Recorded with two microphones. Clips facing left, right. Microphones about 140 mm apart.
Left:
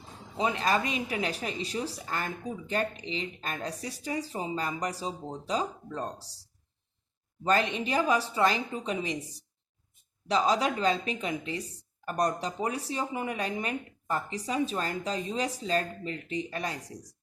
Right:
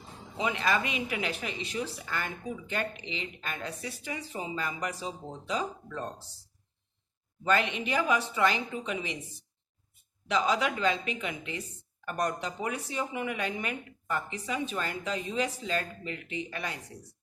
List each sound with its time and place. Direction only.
0.3 s speech: 35° left (ahead or behind)
10.2 s speech: 35° left (ahead or behind)